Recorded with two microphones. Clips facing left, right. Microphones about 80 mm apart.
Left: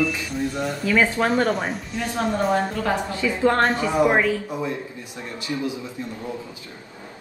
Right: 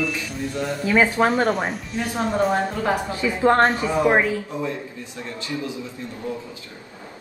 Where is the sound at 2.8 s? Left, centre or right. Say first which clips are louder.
Right 1 dB; centre.